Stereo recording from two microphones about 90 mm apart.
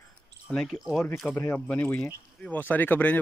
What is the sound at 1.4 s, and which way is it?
Speech, 20° left (ahead or behind).